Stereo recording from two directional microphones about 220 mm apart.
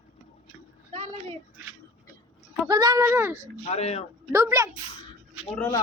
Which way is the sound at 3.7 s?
30° left (ahead or behind).